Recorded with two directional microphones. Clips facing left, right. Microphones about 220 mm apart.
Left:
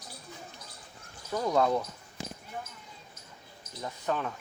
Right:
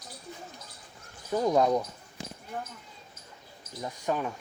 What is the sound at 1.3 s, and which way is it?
Speech, 20° right (ahead or behind).